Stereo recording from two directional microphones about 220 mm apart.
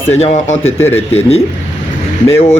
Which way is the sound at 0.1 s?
30° left (ahead or behind).